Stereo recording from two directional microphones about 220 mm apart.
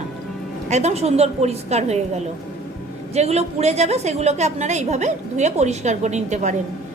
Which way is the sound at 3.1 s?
30° right (ahead or behind).